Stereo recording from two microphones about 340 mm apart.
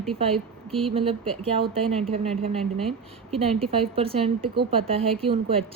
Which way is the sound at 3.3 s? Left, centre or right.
Centre.